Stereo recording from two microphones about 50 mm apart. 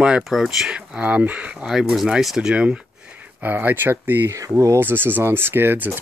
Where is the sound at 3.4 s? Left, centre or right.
Right.